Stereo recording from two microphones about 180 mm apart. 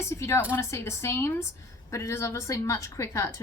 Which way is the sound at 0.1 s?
15° left (ahead or behind).